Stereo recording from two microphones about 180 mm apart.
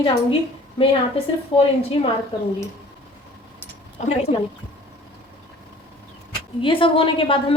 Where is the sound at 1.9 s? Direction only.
30° left (ahead or behind).